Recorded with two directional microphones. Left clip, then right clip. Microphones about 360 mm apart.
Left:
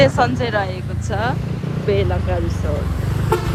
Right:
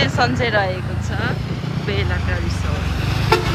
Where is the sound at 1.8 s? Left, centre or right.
Centre.